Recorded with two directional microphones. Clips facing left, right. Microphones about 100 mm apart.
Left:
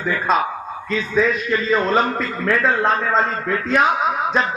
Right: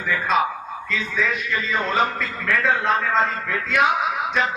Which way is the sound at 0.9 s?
35° left (ahead or behind).